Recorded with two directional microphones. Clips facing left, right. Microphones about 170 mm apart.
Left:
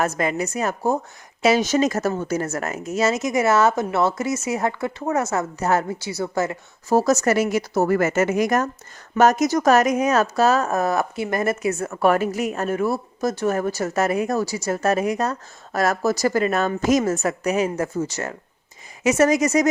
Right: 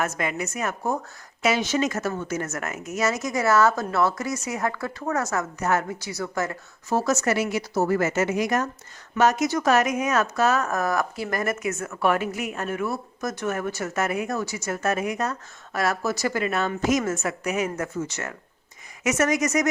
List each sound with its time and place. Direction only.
0.0 s a woman's voice: 35° left (ahead or behind)
6.9 s a woman's voice: 40° left (ahead or behind)